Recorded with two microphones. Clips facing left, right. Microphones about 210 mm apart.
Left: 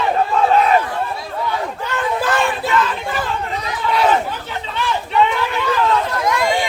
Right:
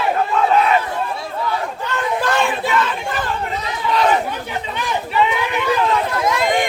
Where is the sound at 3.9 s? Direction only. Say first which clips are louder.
Even; 10° left (ahead or behind).